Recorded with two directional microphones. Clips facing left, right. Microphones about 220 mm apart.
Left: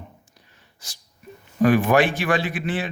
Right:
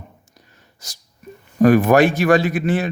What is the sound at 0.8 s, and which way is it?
A man's voice, 40° right (ahead or behind).